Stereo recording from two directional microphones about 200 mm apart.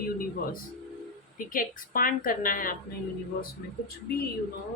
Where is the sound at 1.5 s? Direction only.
45° left (ahead or behind).